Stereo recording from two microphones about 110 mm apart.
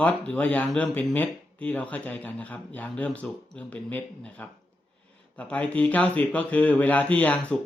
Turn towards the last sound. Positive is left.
turn(degrees=10)  # may be behind; listen again after turning